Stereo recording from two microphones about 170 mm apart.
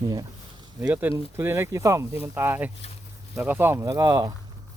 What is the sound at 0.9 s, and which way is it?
Speech, 10° right (ahead or behind).